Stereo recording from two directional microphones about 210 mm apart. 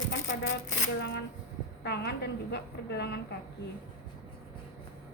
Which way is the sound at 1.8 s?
50° left (ahead or behind).